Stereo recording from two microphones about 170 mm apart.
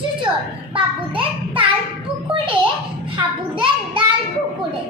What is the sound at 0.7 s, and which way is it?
Music, 30° right (ahead or behind).